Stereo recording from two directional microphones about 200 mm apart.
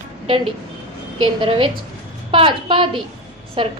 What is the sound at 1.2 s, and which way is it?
A woman's voice, 25° right (ahead or behind).